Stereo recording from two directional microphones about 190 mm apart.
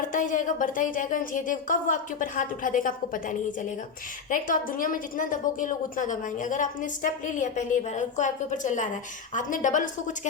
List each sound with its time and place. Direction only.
0.1 s a woman's voice: 40° left (ahead or behind)
4.3 s a woman's voice: 45° left (ahead or behind)